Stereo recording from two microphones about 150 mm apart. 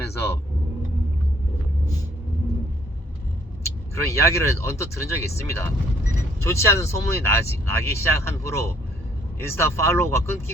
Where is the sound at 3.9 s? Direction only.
20° left (ahead or behind).